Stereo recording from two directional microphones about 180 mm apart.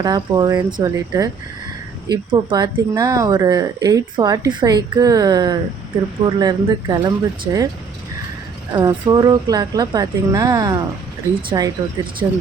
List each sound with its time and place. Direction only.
0.0 s speech: 20° right (ahead or behind)
8.7 s speech: 25° right (ahead or behind)